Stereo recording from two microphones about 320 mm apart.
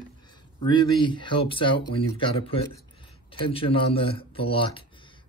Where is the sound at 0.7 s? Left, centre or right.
Centre.